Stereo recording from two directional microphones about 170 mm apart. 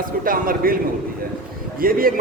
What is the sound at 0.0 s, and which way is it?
Speech, 55° right (ahead or behind).